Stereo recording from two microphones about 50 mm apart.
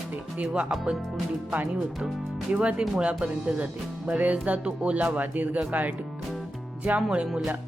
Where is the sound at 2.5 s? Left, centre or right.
Right.